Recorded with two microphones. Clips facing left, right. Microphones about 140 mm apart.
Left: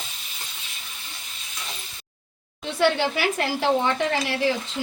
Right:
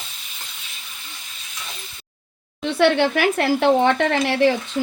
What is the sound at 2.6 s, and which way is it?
Speech, 65° right (ahead or behind).